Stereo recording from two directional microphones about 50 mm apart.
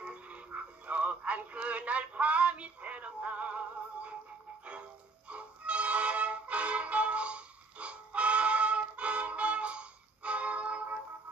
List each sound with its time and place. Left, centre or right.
0.0 s synthetic singing: right
5.3 s music: right